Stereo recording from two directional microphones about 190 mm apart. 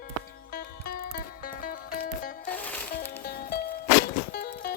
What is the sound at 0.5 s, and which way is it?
Music, 50° left (ahead or behind).